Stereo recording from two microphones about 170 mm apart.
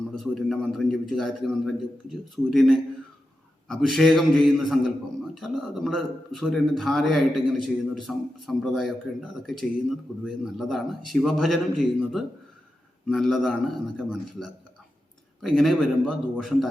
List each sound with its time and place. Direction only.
0.2 s a man's voice: centre (ahead or behind)